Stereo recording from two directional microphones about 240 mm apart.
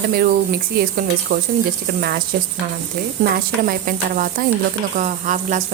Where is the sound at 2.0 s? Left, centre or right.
Right.